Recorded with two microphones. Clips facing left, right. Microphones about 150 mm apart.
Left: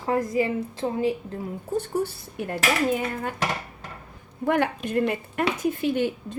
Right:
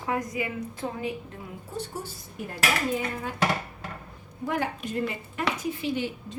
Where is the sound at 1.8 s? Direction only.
65° left (ahead or behind).